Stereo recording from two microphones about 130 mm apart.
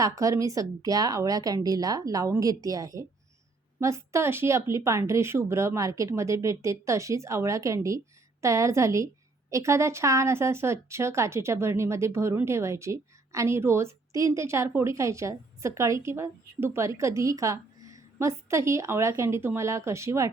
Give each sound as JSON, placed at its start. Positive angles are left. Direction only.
{"t": 0.0, "sound": "speech", "side_deg": -25}